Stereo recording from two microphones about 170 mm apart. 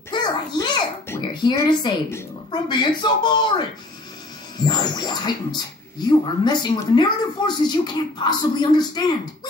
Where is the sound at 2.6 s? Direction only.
25° left (ahead or behind).